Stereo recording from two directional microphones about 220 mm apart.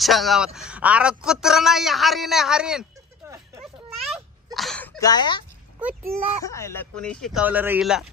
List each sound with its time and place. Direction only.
0.0 s a man's voice: centre (ahead or behind)
4.6 s speech: 5° left (ahead or behind)
5.8 s a child's voice: 5° right (ahead or behind)
6.4 s a man's voice: 15° left (ahead or behind)